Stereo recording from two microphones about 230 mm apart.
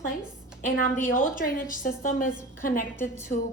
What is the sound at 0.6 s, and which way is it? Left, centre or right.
A woman's voice, left.